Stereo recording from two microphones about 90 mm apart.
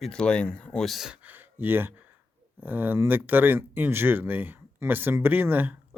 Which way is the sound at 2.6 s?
20° right (ahead or behind).